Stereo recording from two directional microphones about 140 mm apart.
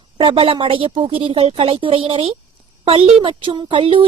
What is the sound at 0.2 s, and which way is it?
A woman's voice, 40° right (ahead or behind).